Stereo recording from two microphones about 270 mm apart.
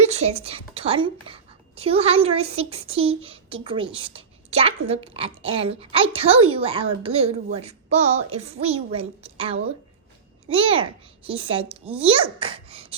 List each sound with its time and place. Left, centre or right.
0.0 s a woman's voice: right